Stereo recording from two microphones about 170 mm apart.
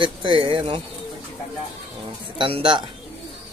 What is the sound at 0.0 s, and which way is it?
Speech, 30° right (ahead or behind).